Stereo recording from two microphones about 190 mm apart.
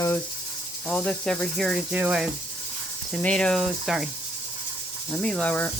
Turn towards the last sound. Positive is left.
turn(degrees=5)  # may be behind; listen again after turning